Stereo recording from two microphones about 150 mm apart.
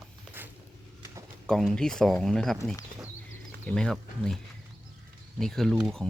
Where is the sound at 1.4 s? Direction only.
5° left (ahead or behind).